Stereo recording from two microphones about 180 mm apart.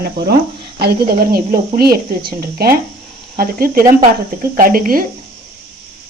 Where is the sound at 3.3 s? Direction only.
55° right (ahead or behind).